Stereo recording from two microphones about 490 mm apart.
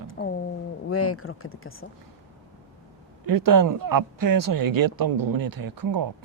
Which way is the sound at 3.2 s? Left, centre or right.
Right.